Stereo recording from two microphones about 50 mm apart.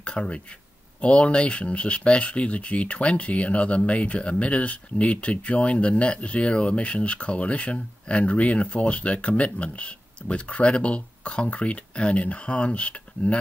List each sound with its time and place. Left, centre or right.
0.0 s speech: left